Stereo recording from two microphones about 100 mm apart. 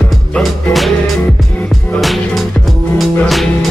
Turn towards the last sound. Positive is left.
turn(degrees=0)  # may be behind; listen again after turning